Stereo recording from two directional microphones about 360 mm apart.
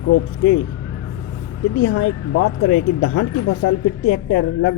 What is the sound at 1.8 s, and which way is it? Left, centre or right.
Speech, left.